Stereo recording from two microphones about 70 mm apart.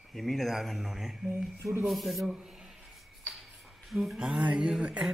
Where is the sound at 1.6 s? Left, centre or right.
Right.